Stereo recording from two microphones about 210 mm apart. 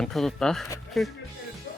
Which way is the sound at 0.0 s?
Centre (ahead or behind).